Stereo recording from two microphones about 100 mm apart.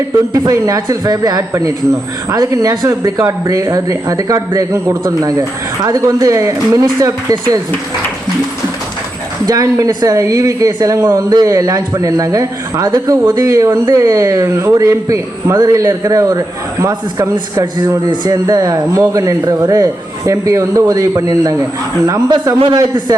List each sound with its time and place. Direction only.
0.3 s speech: 35° right (ahead or behind)
9.5 s speech: 35° right (ahead or behind)
17.5 s speech: 35° right (ahead or behind)